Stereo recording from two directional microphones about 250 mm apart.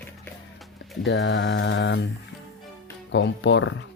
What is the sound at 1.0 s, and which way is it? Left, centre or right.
Speech, left.